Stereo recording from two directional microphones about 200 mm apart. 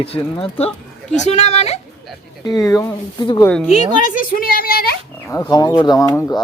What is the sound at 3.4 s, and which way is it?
Speech, 5° left (ahead or behind).